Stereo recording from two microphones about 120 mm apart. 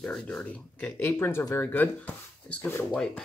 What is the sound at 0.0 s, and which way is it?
Speech, 10° left (ahead or behind).